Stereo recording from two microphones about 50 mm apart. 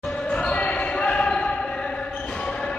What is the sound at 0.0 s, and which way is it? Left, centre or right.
Basketball bounce, centre.